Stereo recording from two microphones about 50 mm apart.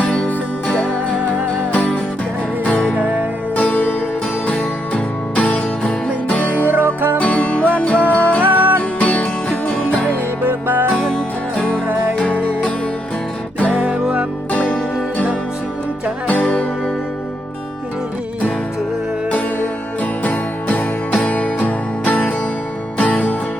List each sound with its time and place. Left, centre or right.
3.5 s music: left
6.7 s music: right
7.2 s music: left
8.4 s music: right
8.8 s music: left
10.4 s music: right
10.9 s music: centre
12.1 s music: left
13.7 s music: right
14.5 s music: left
16.3 s music: left
19.3 s music: left